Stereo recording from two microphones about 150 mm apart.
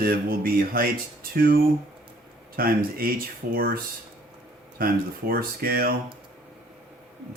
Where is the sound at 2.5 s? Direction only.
80° right.